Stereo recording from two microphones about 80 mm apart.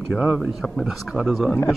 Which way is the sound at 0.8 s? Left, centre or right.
Centre.